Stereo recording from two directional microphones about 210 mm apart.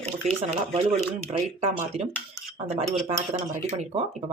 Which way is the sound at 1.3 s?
30° right (ahead or behind).